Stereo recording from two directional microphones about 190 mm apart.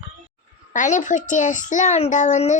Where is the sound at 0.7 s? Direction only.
40° left (ahead or behind).